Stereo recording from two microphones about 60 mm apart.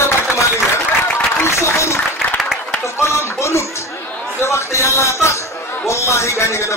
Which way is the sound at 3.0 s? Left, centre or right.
Left.